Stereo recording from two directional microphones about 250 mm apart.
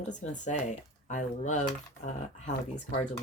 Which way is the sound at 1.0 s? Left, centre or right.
Left.